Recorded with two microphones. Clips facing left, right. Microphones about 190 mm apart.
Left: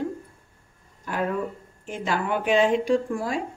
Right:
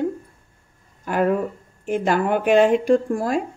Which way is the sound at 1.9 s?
50° right (ahead or behind).